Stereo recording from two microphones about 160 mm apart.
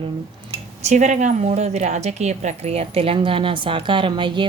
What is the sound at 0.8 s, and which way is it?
A woman's voice, 45° right (ahead or behind).